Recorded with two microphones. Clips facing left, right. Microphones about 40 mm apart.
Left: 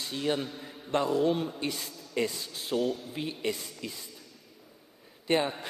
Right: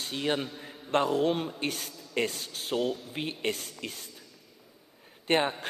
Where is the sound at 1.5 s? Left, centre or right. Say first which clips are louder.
Right 1 dB; right.